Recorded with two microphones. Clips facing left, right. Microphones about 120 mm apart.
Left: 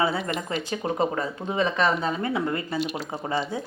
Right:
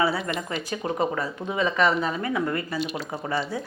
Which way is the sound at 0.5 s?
25° left (ahead or behind).